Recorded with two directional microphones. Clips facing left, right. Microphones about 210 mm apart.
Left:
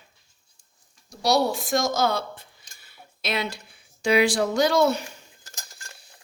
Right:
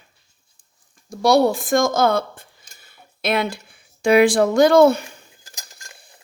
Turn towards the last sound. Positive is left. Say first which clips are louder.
# right 8 dB
turn(degrees=-55)  # may be behind; listen again after turning